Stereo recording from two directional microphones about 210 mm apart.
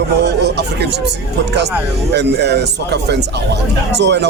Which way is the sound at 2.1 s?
55° right (ahead or behind).